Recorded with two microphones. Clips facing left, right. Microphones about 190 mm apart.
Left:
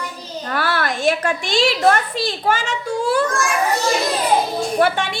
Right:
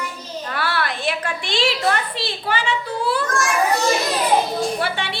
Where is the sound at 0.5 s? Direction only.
45° left (ahead or behind).